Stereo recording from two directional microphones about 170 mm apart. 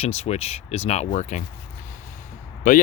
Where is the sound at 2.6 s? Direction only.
50° left (ahead or behind).